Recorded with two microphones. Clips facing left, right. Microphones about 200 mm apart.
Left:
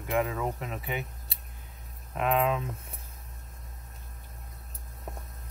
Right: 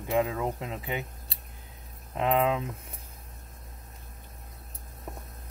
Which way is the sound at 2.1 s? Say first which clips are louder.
Right 1 dB; 20° right (ahead or behind).